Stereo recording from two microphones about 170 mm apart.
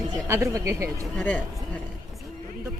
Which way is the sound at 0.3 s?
15° right (ahead or behind).